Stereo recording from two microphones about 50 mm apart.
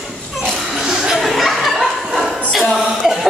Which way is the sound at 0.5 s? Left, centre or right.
Centre.